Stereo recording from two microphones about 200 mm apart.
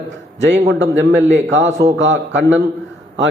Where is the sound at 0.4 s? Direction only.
60° right (ahead or behind).